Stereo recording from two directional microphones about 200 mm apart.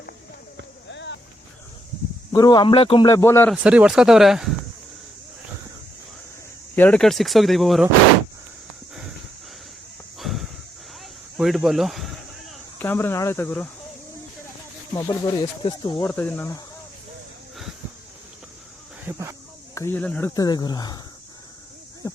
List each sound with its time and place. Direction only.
0.9 s a sound: 65° left (ahead or behind)
2.3 s speech: 20° left (ahead or behind)
3.1 s speech: 15° left (ahead or behind)
3.5 s speech: 5° right (ahead or behind)
6.7 s speech: 5° left (ahead or behind)
10.2 s a sound: centre (ahead or behind)
12.8 s speech: 10° left (ahead or behind)
14.9 s speech: 20° left (ahead or behind)
16.0 s speech: 10° left (ahead or behind)
19.0 s speech: 15° right (ahead or behind)
19.7 s speech: 10° left (ahead or behind)
20.3 s speech: 20° left (ahead or behind)
22.0 s a sound: 15° left (ahead or behind)